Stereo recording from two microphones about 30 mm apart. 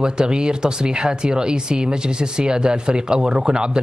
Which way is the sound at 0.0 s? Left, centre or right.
Right.